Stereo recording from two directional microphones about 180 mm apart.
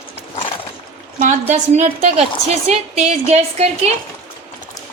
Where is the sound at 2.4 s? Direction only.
35° right (ahead or behind).